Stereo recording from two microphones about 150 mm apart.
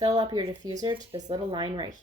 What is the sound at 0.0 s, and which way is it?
A woman's voice, 30° right (ahead or behind).